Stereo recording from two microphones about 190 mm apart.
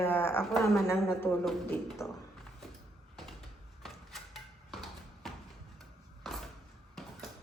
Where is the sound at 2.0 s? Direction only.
15° left (ahead or behind).